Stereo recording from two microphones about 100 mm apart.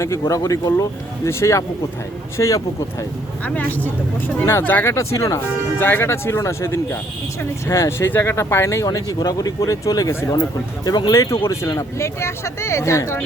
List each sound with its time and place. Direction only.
0.0 s speech: 30° left (ahead or behind)
3.4 s speech: 15° left (ahead or behind); by 5.4 s 30° left (ahead or behind)
5.4 s speech: 20° left (ahead or behind); by 10.1 s 35° left (ahead or behind)
10.1 s speech: 25° left (ahead or behind)
10.8 s speech: 40° left (ahead or behind)
11.1 s speech: 30° left (ahead or behind)